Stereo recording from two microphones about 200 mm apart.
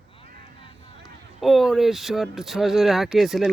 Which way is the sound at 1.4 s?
Centre (ahead or behind).